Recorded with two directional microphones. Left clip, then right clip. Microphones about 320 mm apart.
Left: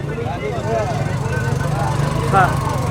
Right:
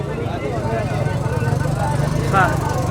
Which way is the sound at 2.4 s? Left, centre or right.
Centre.